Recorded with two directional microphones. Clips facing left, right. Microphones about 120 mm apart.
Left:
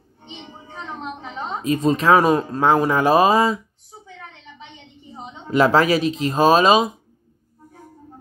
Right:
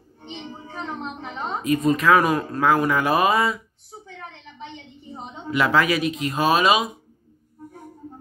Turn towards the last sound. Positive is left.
turn(degrees=35)  # may be behind; listen again after turning